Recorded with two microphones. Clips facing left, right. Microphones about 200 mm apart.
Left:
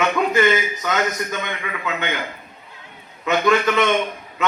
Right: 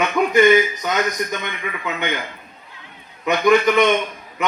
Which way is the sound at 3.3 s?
15° right (ahead or behind).